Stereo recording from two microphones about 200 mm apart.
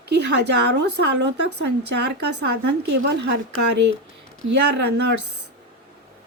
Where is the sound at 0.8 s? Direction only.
60° right (ahead or behind).